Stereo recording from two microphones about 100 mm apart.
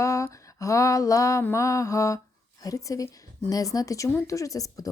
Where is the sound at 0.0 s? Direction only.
30° left (ahead or behind).